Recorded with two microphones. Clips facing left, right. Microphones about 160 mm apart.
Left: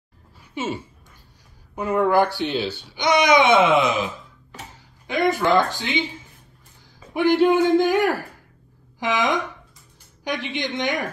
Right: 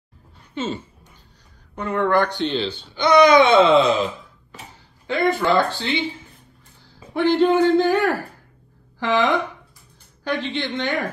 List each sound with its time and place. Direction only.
0.6 s speech: 10° left (ahead or behind)
7.2 s speech: 10° left (ahead or behind)